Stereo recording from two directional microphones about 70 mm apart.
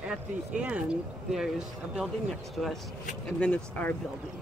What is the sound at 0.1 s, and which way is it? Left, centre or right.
Speech, centre.